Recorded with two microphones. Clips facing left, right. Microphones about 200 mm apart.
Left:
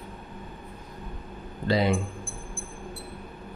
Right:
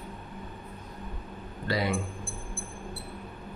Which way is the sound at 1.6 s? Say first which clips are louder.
Left 5 dB; 25° left (ahead or behind).